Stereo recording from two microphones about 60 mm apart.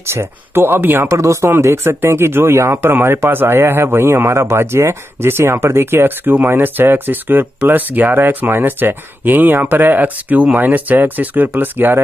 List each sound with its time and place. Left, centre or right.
0.0 s speech: right
1.1 s speech: right